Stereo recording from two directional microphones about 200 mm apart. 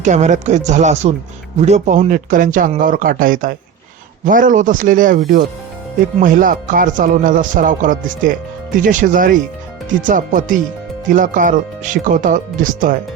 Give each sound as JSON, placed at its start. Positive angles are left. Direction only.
{"t": 0.0, "sound": "speech", "side_deg": -35}